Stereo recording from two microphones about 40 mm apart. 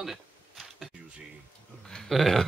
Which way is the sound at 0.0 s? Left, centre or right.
Centre.